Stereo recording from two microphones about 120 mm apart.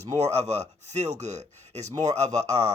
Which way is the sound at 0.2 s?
70° right (ahead or behind).